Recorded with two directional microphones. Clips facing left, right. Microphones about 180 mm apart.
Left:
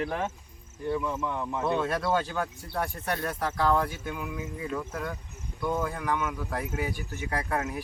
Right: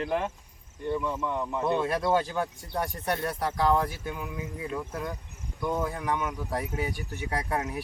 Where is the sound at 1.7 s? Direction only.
15° right (ahead or behind).